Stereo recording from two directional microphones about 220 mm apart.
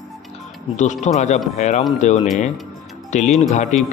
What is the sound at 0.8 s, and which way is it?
Speech, 30° left (ahead or behind).